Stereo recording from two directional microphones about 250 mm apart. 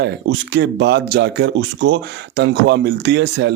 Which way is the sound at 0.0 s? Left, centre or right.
Right.